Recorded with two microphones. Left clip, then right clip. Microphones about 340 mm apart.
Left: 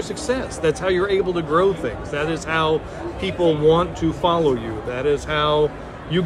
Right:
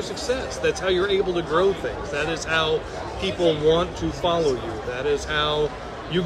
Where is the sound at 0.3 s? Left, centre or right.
Left.